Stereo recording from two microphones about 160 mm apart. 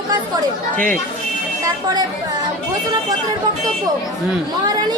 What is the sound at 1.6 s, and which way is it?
Speech, 25° right (ahead or behind).